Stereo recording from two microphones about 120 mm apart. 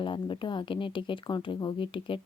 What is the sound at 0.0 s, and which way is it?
Speech, 45° left (ahead or behind).